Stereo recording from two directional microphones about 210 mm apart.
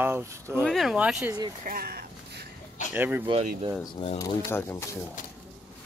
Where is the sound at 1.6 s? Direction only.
45° right (ahead or behind).